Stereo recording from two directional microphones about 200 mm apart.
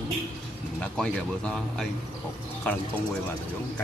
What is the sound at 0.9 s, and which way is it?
Speech, 5° left (ahead or behind).